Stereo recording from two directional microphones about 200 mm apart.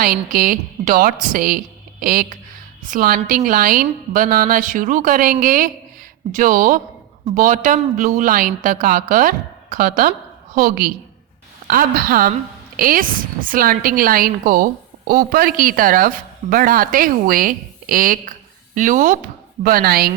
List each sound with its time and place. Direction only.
0.0 s a woman's voice: 45° right (ahead or behind)